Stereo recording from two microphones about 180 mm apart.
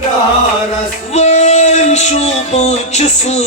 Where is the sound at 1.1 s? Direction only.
40° left (ahead or behind).